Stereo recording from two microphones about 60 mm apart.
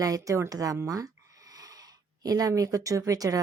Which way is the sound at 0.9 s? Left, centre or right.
Right.